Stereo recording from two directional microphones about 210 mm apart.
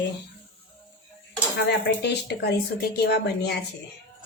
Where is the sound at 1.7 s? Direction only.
55° left (ahead or behind).